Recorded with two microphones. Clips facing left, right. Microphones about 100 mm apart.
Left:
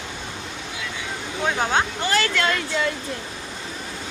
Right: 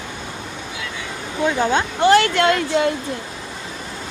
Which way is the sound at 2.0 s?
60° right (ahead or behind).